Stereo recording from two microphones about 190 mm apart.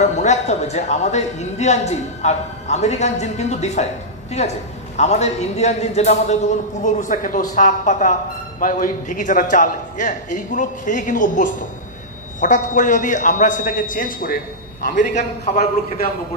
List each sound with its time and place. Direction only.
0.0 s a woman's voice: 40° left (ahead or behind)